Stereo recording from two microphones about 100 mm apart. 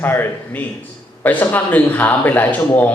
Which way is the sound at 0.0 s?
20° left (ahead or behind).